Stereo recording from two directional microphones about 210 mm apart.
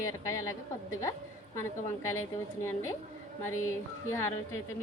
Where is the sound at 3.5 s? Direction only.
75° left (ahead or behind).